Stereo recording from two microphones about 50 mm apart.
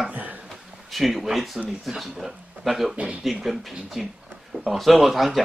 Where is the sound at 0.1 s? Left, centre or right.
Right.